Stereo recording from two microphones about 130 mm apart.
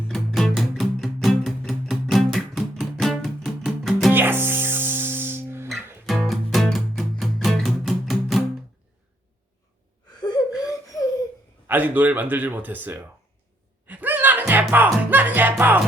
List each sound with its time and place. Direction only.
0.1 s music: centre (ahead or behind)
4.1 s music: 15° right (ahead or behind)
6.1 s music: centre (ahead or behind)
10.2 s gasp: 30° left (ahead or behind)
11.7 s speech: 15° right (ahead or behind)
13.8 s music: 15° right (ahead or behind)